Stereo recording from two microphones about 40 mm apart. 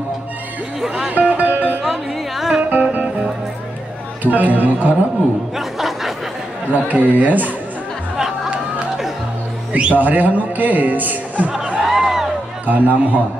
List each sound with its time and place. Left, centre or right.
0.7 s music: centre
1.3 s music: right
1.8 s music: centre
2.7 s music: right
4.2 s speech: right
5.6 s a sound: centre
6.7 s speech: right
9.7 s a man's voice: right
9.9 s speech: right
11.8 s a sound: centre
12.6 s speech: right